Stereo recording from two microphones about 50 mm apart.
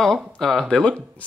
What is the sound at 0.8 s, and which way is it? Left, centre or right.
Speech, centre.